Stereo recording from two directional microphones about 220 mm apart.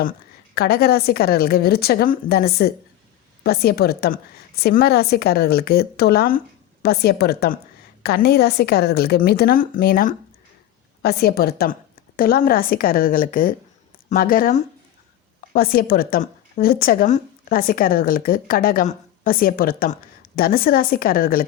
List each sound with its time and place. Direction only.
0.0 s a woman's voice: 45° left (ahead or behind)